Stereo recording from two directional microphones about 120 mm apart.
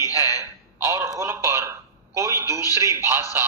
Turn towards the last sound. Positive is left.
turn(degrees=-20)  # may be behind; listen again after turning